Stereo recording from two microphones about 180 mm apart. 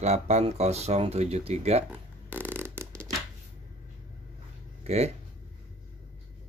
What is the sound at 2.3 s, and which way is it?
Hands, 10° right (ahead or behind).